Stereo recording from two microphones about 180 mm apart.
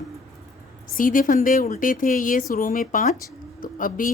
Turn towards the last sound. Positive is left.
turn(degrees=50)  # may be behind; listen again after turning